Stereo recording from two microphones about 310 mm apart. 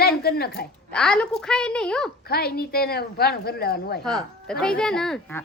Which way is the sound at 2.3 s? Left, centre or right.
Left.